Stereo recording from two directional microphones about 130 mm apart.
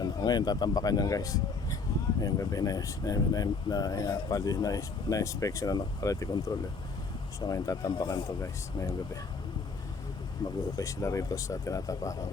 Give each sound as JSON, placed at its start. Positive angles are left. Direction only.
{"t": 0.0, "sound": "speech", "side_deg": 35}
{"t": 10.8, "sound": "speech", "side_deg": 25}